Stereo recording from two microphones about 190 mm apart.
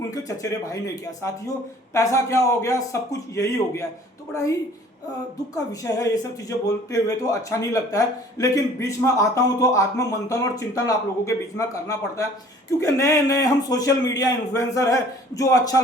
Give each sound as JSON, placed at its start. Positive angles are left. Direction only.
{"t": 0.1, "sound": "speech", "side_deg": 20}
{"t": 5.5, "sound": "speech", "side_deg": 20}